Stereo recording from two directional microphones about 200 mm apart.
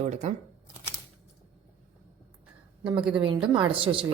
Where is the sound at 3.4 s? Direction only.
25° right (ahead or behind).